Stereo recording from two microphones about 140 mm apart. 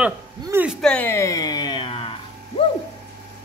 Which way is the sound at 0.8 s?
5° left (ahead or behind).